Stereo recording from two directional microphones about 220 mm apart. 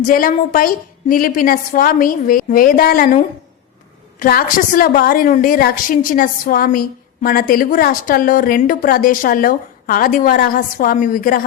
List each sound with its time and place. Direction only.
0.1 s a woman's voice: 40° left (ahead or behind)
4.2 s a woman's voice: 40° left (ahead or behind)